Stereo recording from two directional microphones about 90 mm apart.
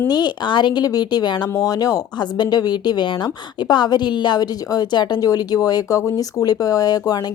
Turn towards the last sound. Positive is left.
turn(degrees=45)  # may be behind; listen again after turning